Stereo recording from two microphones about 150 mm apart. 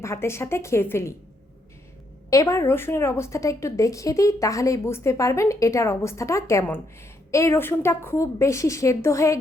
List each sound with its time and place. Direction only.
0.0 s a woman's voice: 15° left (ahead or behind)
2.3 s a woman's voice: 20° left (ahead or behind)